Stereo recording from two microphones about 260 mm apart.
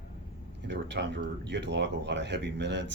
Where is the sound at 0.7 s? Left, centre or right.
Right.